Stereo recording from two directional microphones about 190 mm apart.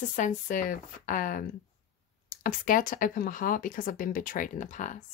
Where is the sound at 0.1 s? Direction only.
45° left (ahead or behind).